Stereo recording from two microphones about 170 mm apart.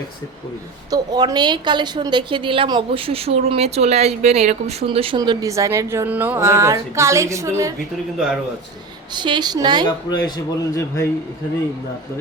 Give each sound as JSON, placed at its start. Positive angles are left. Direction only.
{"t": 0.9, "sound": "a woman's voice", "side_deg": -25}
{"t": 9.1, "sound": "a woman's voice", "side_deg": -25}
{"t": 10.1, "sound": "speech", "side_deg": 25}